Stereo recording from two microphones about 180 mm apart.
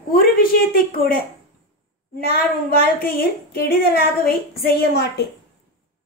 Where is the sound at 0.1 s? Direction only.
55° left (ahead or behind).